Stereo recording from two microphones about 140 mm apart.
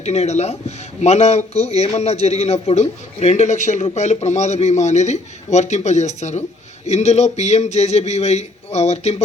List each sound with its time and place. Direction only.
0.0 s a man's voice: 50° left (ahead or behind)